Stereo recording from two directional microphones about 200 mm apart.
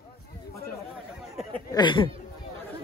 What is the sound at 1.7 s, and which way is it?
Speech, 25° left (ahead or behind).